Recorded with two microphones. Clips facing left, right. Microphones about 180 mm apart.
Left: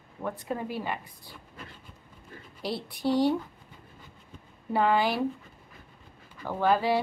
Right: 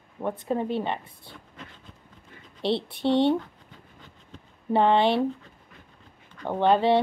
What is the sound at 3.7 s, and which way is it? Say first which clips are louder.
Train: right 1 dB; 10° left (ahead or behind).